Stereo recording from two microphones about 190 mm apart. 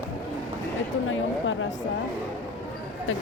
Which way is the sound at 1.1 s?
90° left.